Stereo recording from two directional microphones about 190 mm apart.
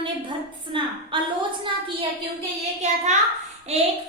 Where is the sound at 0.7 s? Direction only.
25° right (ahead or behind).